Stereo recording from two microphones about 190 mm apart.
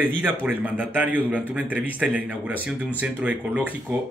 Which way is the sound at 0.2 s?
10° right (ahead or behind).